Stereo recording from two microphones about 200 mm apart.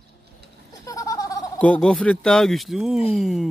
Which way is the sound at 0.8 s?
15° left (ahead or behind).